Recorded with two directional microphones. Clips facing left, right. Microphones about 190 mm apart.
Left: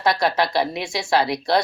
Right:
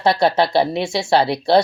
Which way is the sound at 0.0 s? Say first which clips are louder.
Right 4 dB; 30° right (ahead or behind).